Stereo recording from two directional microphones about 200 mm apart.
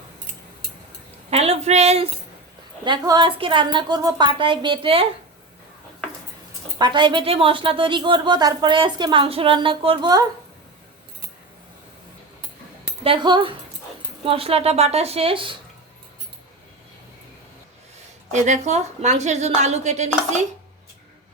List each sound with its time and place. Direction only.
1.3 s speech: 30° right (ahead or behind)
3.0 s speech: 20° right (ahead or behind)
6.7 s speech: 20° right (ahead or behind)
13.1 s speech: 25° right (ahead or behind)
18.3 s a woman's voice: 35° right (ahead or behind)